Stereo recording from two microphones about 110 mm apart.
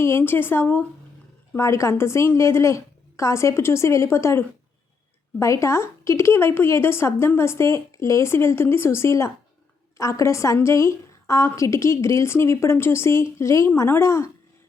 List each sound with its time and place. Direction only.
0.0 s a woman's voice: 25° left (ahead or behind)